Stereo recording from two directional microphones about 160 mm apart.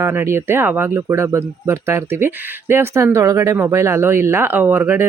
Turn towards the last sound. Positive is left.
turn(degrees=-10)  # may be behind; listen again after turning